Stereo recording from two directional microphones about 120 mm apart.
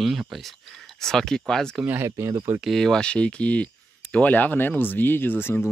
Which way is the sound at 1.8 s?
20° right (ahead or behind).